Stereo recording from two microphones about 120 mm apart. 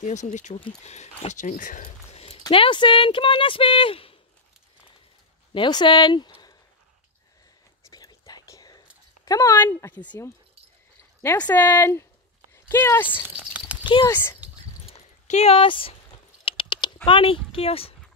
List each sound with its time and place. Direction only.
0.0 s speech: 75° left (ahead or behind)
0.8 s speech: 70° left (ahead or behind); by 2.2 s 90° left
2.5 s a sound: 45° left (ahead or behind)
5.5 s speech: 40° left (ahead or behind)
7.9 s whispering: 35° left (ahead or behind)
9.2 s speech: 25° left (ahead or behind)
11.3 s speech: 15° left (ahead or behind)
13.4 s a sound: 10° right (ahead or behind)
15.2 s a sound: 60° left (ahead or behind)
16.4 s typing: 45° left (ahead or behind)